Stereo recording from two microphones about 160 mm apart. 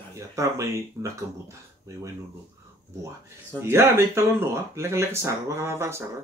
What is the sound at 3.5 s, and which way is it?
Speech, 15° right (ahead or behind).